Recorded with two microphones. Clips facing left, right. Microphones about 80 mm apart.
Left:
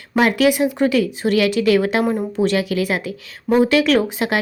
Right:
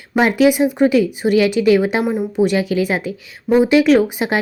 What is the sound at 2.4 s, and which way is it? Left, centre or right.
Speech, right.